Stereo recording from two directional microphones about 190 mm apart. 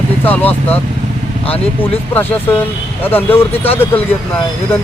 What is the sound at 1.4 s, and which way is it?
Speech, 30° left (ahead or behind).